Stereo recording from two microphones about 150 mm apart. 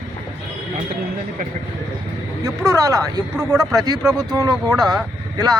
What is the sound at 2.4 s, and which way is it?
Speech, 20° right (ahead or behind).